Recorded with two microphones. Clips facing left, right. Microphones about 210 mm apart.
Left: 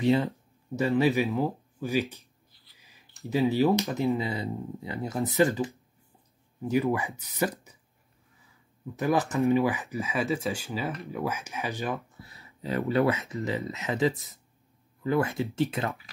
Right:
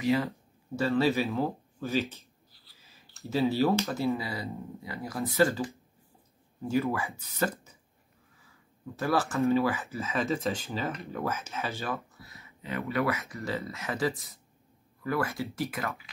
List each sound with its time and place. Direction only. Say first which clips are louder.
0.7 s speech: left 2 dB; 15° left (ahead or behind)
6.7 s speech: left 3 dB; 15° left (ahead or behind)
8.9 s speech: left 2 dB; 20° left (ahead or behind)
12.1 s a sound: left 2 dB; 30° left (ahead or behind)
13.1 s speech: left 3 dB; 20° left (ahead or behind)